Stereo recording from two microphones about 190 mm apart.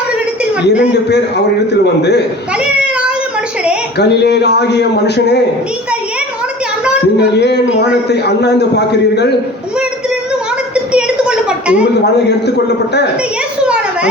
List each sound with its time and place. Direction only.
1.7 s speech: 65° left (ahead or behind)
3.9 s speech: 60° left (ahead or behind)
7.2 s speech: 65° left (ahead or behind)
10.9 s a sound: 5° right (ahead or behind)
12.5 s speech: 60° left (ahead or behind)